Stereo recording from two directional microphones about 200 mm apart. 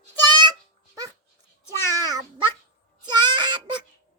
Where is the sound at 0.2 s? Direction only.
20° right (ahead or behind).